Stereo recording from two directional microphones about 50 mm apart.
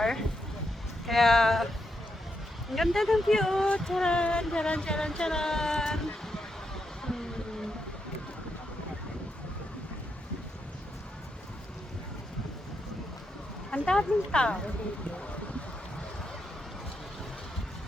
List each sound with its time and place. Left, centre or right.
0.0 s speech: centre
2.7 s speech: centre
7.0 s a sound: centre
13.8 s speech: centre